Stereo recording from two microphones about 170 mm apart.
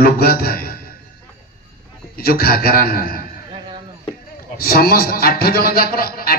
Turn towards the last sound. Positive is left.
turn(degrees=60)  # may be behind; listen again after turning